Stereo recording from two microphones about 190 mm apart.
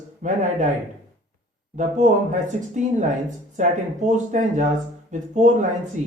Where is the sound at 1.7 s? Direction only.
40° right (ahead or behind).